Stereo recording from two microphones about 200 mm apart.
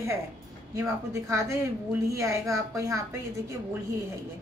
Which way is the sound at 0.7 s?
15° right (ahead or behind).